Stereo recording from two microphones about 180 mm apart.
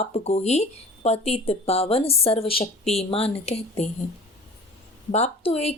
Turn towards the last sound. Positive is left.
turn(degrees=35)  # may be behind; listen again after turning